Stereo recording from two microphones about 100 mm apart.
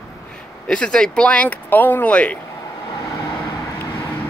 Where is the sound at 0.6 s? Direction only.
10° left (ahead or behind).